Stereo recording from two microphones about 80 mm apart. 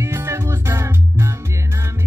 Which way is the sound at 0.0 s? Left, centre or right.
Right.